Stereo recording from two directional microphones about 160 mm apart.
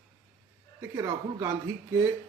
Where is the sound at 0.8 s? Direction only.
20° right (ahead or behind).